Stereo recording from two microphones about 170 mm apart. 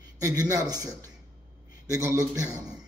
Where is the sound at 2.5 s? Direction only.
5° right (ahead or behind).